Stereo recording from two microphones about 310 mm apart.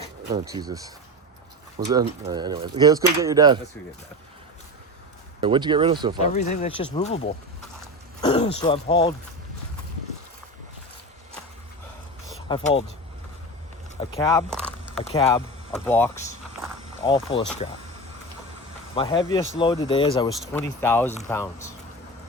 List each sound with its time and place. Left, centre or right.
0.5 s speech: centre
1.9 s speech: centre
5.4 s speech: centre
6.3 s speech: left
12.5 s speech: centre
14.0 s speech: centre
17.0 s speech: centre
18.9 s speech: centre